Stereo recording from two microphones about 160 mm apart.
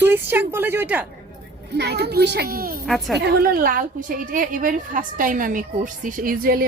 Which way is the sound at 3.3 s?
75° right (ahead or behind).